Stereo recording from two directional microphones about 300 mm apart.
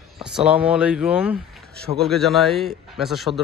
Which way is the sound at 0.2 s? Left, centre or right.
Centre.